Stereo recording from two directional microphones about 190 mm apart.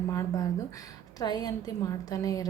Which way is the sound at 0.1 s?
15° left (ahead or behind).